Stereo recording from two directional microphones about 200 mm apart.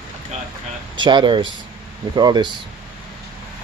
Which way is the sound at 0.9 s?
25° right (ahead or behind).